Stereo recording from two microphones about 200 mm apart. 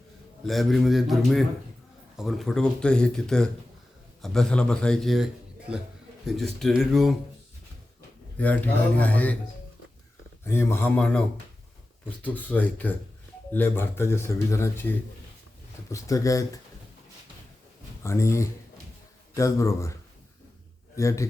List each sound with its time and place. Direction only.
0.4 s a man's voice: centre (ahead or behind)
8.4 s speech: 10° left (ahead or behind)
10.4 s speech: 10° left (ahead or behind)
18.0 s speech: 15° left (ahead or behind)